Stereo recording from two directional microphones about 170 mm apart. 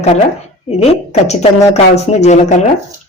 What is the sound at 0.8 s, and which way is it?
Speech, 40° left (ahead or behind).